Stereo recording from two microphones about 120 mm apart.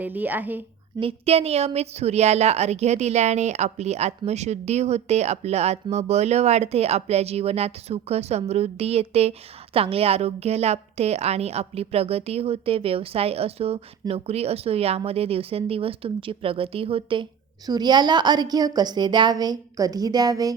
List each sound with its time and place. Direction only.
0.0 s speech: 15° right (ahead or behind)
0.9 s a woman's voice: 55° right (ahead or behind)
17.7 s a woman's voice: 35° right (ahead or behind)